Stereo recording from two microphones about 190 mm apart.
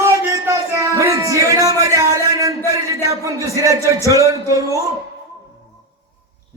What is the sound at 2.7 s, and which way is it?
A man's voice, 15° right (ahead or behind).